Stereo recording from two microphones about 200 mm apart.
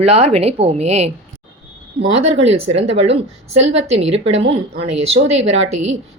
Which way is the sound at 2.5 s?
30° right (ahead or behind).